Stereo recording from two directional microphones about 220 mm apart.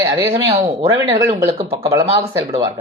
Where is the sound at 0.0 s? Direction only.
15° right (ahead or behind).